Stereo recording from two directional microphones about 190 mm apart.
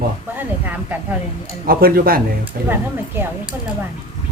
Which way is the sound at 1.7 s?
50° right (ahead or behind).